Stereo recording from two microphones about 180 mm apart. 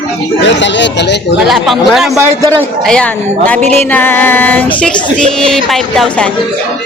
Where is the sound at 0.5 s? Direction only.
80° left.